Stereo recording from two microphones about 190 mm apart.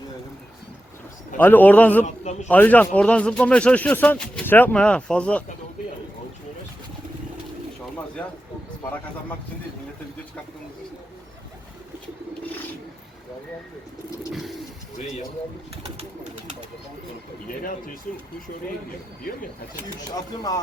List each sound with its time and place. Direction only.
1.4 s a man's voice: 10° left (ahead or behind)
2.0 s a man's voice: 35° left (ahead or behind)
2.5 s a man's voice: 10° left (ahead or behind)
17.6 s speech: 45° left (ahead or behind)
20.1 s speech: 20° left (ahead or behind)